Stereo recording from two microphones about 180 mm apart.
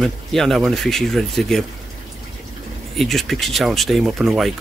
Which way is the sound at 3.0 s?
Centre (ahead or behind).